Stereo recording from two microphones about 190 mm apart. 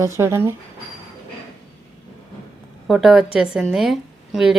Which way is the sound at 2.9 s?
Centre (ahead or behind).